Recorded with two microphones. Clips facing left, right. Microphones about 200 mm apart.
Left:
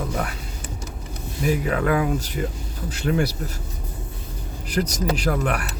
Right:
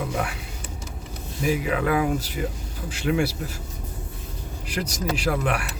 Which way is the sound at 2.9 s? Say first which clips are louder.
Left 1 dB; 40° left (ahead or behind).